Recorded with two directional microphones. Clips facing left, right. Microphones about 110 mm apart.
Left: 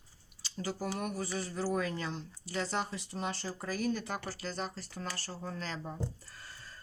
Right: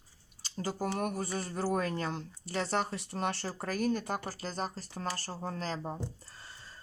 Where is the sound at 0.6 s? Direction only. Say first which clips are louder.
Right 3 dB; 45° right (ahead or behind).